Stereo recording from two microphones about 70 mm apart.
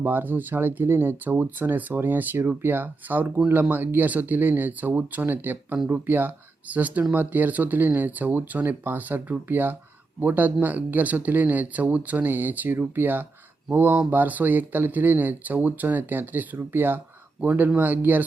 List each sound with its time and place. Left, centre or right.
0.0 s speech: right